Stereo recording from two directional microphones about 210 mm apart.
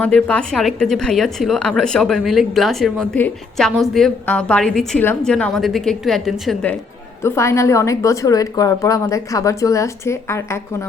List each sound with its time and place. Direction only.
0.0 s a woman's voice: 5° left (ahead or behind)